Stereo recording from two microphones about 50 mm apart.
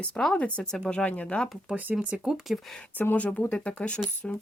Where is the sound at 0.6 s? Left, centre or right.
Centre.